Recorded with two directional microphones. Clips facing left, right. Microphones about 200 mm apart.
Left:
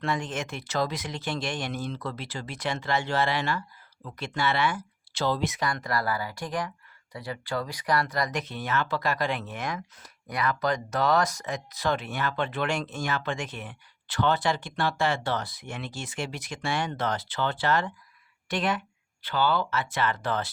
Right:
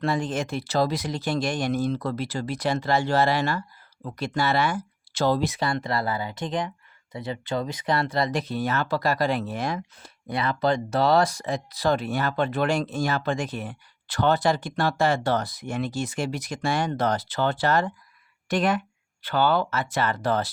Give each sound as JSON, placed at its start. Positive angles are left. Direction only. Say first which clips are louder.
{"t": 0.0, "sound": "a woman's voice", "louder": "right 5 dB", "side_deg": -35}